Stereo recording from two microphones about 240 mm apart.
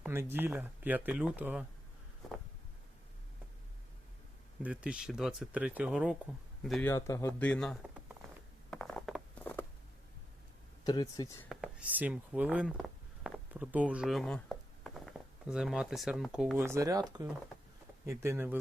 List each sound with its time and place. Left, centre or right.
0.0 s speech: centre
4.6 s speech: centre
6.9 s speech: centre
8.7 s zipper: centre
10.8 s speech: centre
11.4 s speech: centre